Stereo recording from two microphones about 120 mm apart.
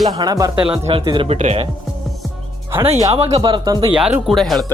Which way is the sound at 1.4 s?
70° right (ahead or behind).